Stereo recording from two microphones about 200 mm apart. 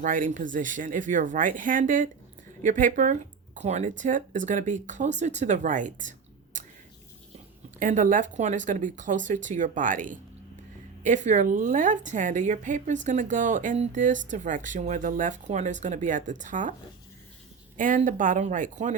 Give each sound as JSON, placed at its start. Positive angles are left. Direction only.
{"t": 0.0, "sound": "a woman's voice", "side_deg": -40}
{"t": 7.8, "sound": "a woman's voice", "side_deg": -40}
{"t": 17.7, "sound": "a woman's voice", "side_deg": -40}